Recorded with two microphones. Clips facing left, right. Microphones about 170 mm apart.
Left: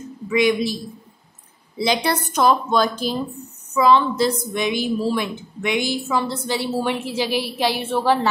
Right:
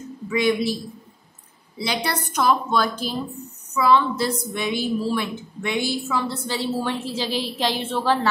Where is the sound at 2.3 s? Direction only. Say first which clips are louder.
Left 2 dB; 20° left (ahead or behind).